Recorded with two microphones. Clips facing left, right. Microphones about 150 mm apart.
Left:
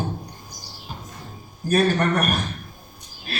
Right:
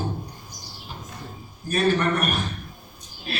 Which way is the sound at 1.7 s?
40° left (ahead or behind).